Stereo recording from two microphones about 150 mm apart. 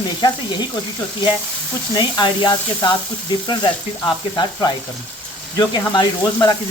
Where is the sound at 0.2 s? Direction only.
30° left (ahead or behind).